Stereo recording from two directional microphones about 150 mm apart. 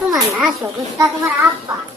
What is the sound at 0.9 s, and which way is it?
Speech, 20° right (ahead or behind).